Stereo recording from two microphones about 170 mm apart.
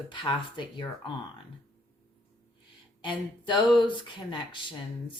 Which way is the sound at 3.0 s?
30° left (ahead or behind).